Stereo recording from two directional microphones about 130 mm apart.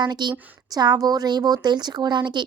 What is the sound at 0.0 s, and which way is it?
Speech, 35° right (ahead or behind).